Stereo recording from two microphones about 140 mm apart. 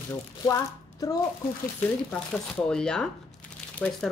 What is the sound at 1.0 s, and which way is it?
Speech, 25° left (ahead or behind).